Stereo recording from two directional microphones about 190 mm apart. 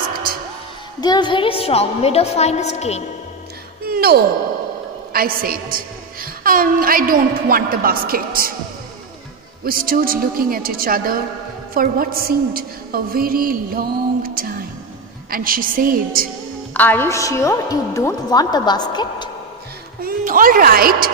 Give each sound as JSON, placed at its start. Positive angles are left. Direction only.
{"t": 0.1, "sound": "music", "side_deg": -50}
{"t": 1.0, "sound": "a woman's voice", "side_deg": 25}
{"t": 3.8, "sound": "sigh", "side_deg": -55}
{"t": 5.1, "sound": "a woman's voice", "side_deg": -50}
{"t": 9.7, "sound": "a woman's voice", "side_deg": -50}
{"t": 16.7, "sound": "a woman's voice", "side_deg": 10}
{"t": 20.0, "sound": "a woman's voice", "side_deg": -50}